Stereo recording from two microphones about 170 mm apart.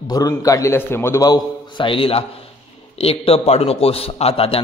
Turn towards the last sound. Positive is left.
turn(degrees=35)  # may be behind; listen again after turning